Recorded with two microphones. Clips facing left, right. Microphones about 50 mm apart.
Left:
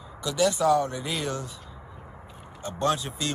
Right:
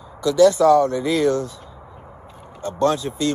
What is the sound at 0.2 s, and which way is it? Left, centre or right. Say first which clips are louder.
Speech: right 10 dB; left.